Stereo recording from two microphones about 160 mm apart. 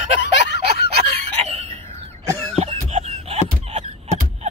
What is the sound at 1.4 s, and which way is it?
Chicken, 40° right (ahead or behind).